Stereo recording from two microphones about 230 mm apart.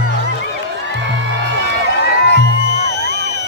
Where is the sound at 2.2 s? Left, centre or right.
Left.